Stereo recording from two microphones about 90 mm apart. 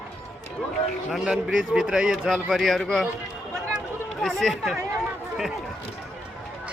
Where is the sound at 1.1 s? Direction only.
5° right (ahead or behind).